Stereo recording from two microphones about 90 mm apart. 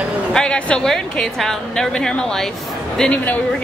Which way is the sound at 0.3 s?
10° left (ahead or behind).